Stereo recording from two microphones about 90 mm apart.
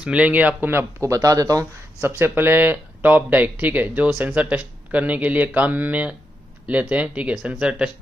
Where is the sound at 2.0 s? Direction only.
25° right (ahead or behind).